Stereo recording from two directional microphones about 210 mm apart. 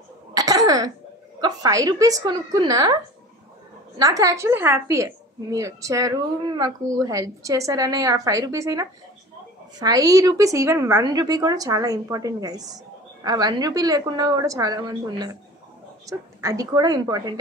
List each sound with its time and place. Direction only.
0.3 s cough: 15° right (ahead or behind)
1.4 s a woman's voice: 15° right (ahead or behind)
4.0 s a woman's voice: 15° right (ahead or behind)